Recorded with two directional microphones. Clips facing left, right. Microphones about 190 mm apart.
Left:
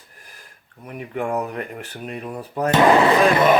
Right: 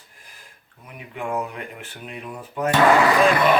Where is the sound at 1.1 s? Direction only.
40° left (ahead or behind).